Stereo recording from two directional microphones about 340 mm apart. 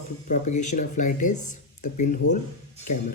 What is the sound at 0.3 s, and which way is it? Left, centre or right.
Speech, left.